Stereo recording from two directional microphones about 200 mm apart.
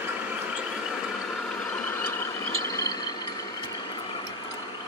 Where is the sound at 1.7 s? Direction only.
10° left (ahead or behind).